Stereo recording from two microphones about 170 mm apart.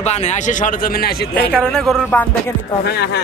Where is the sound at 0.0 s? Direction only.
40° left (ahead or behind); by 1.3 s 60° left (ahead or behind).